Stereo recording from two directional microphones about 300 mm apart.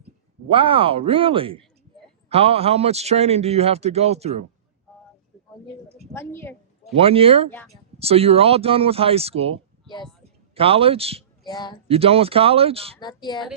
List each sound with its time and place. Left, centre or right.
0.4 s a man's voice: centre
6.1 s a woman's voice: centre
6.9 s a man's voice: centre
11.4 s a woman's voice: centre
11.9 s a man's voice: centre
13.0 s a woman's voice: centre